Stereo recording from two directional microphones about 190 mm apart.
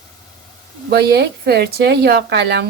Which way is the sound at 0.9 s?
60° right (ahead or behind).